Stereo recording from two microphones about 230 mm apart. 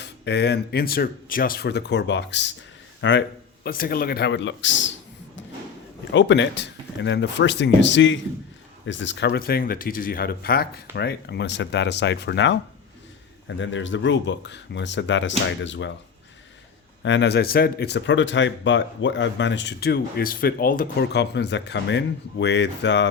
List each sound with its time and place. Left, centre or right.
0.0 s speech: left
6.1 s speech: left
13.6 s speech: left
17.0 s speech: left